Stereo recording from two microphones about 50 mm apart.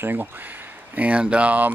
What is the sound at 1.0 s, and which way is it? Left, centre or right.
Speech, right.